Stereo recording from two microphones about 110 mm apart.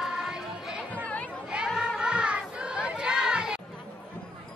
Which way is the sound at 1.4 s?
5° right (ahead or behind).